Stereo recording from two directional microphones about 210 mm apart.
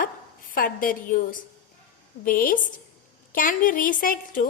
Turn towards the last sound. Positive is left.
turn(degrees=40)  # may be behind; listen again after turning